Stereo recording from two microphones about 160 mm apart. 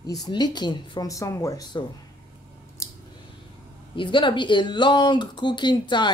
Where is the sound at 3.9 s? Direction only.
30° left (ahead or behind).